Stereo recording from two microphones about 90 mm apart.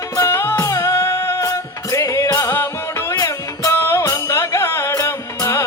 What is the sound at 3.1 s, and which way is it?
Music, 40° left (ahead or behind).